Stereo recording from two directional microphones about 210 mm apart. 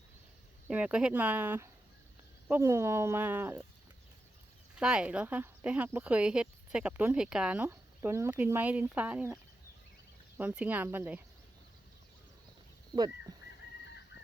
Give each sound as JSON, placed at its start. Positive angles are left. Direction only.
{"t": 0.7, "sound": "speech", "side_deg": -5}
{"t": 4.8, "sound": "speech", "side_deg": -5}
{"t": 13.3, "sound": "bird", "side_deg": -15}